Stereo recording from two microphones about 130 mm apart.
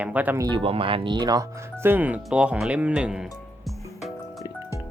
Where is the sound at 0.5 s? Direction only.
45° right (ahead or behind).